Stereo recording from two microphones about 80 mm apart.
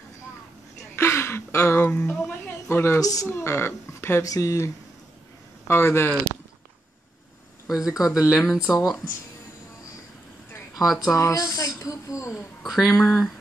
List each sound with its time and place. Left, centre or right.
0.9 s a sound: left
1.9 s speech: centre
2.4 s a sound: left
3.0 s speech: left
3.3 s speech: left
4.2 s speech: left
7.6 s speech: centre
11.1 s speech: left
12.6 s speech: centre
13.0 s speech: centre